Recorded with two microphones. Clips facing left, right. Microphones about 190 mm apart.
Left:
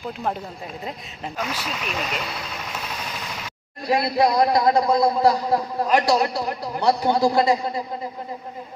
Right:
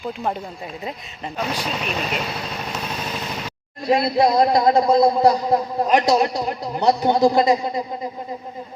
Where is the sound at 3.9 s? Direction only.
25° right (ahead or behind).